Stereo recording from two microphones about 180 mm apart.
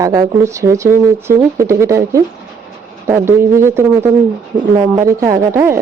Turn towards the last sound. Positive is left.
turn(degrees=-15)  # may be behind; listen again after turning